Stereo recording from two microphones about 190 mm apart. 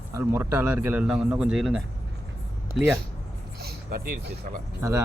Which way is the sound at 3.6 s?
55° right (ahead or behind).